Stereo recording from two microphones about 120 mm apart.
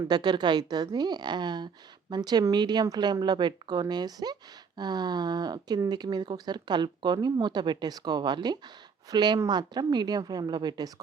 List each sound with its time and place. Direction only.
0.0 s speech: 35° right (ahead or behind)